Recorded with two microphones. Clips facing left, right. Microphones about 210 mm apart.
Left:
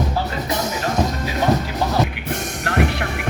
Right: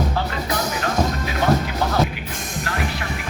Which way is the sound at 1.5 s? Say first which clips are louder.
Right 2 dB; 20° left (ahead or behind).